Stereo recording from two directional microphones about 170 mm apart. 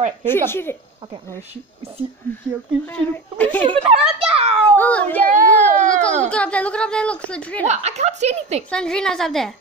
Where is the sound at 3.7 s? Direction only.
35° right (ahead or behind).